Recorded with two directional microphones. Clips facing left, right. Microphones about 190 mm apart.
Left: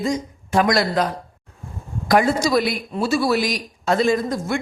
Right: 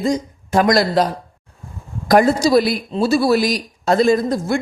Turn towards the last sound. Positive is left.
turn(degrees=-35)  # may be behind; listen again after turning